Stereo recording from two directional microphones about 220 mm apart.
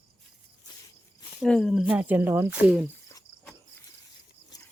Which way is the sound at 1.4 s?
Centre (ahead or behind).